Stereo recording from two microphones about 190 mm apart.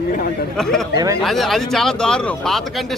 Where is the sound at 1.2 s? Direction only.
Centre (ahead or behind).